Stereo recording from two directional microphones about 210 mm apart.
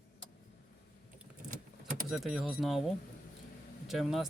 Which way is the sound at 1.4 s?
35° right (ahead or behind).